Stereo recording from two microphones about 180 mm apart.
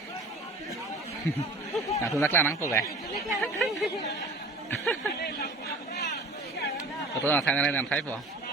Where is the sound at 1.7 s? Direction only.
15° left (ahead or behind).